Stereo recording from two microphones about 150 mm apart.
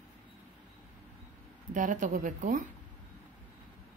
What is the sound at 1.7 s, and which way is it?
A woman's voice, 60° right (ahead or behind).